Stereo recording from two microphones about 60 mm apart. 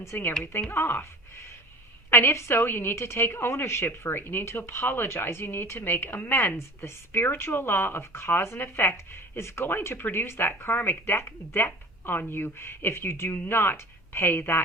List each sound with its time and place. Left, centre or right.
0.1 s speech: left
2.0 s speech: left